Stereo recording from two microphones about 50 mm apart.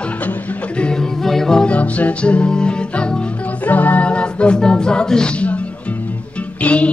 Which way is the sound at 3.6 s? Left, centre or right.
Left.